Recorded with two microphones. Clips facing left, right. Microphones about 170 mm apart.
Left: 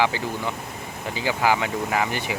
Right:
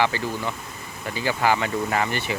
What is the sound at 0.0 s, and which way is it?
Speech, 15° left (ahead or behind).